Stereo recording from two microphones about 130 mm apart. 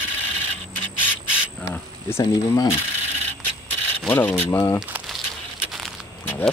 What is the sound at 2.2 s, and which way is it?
Speech, 30° left (ahead or behind).